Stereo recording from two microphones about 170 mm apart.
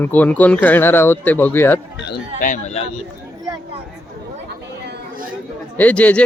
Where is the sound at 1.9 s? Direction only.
90° left.